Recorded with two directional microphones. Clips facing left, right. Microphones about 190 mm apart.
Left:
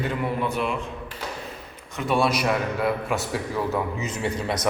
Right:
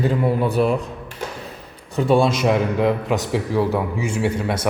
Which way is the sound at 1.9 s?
30° right (ahead or behind).